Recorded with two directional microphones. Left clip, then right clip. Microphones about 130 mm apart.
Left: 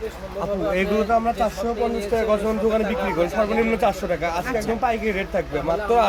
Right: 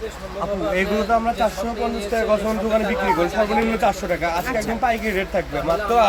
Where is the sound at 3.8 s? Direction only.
55° left (ahead or behind).